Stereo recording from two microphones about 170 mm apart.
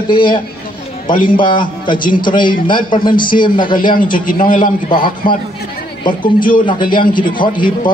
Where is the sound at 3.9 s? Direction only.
55° left (ahead or behind).